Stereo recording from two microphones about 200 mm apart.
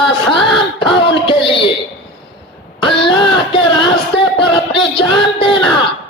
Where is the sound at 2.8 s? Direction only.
25° left (ahead or behind).